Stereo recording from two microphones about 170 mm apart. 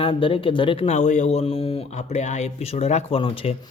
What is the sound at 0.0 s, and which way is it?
Speech, 30° left (ahead or behind).